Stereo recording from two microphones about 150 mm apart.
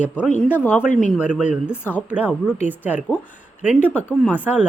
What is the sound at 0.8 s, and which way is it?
Speech, 55° left (ahead or behind).